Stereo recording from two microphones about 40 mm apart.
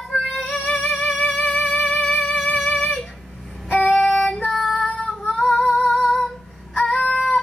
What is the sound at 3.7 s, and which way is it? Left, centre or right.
Child singing, left.